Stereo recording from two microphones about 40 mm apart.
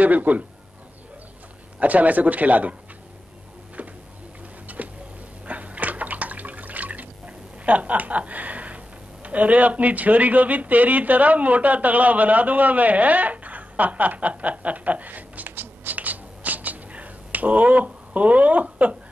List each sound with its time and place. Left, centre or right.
0.0 s speech: right
1.8 s speech: right
3.8 s a sound: right
4.7 s tick-tock: right
5.5 s drip: right
7.2 s speech: right
15.5 s a sound: right
15.9 s finger snapping: right